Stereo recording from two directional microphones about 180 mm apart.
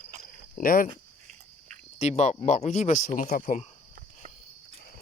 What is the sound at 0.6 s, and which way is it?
Speech, 50° left (ahead or behind).